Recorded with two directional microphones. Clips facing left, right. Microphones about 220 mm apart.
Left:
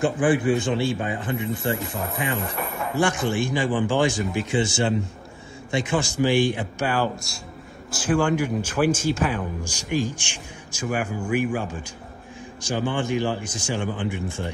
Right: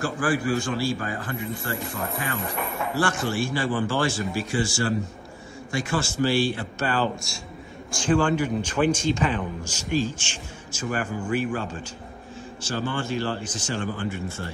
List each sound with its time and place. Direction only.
0.0 s speech: 20° left (ahead or behind)
3.0 s speech: 15° left (ahead or behind)
7.2 s a man's voice: centre (ahead or behind); by 14.5 s 15° left (ahead or behind)